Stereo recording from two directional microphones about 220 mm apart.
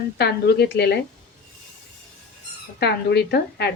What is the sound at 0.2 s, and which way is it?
Speech, 50° left (ahead or behind).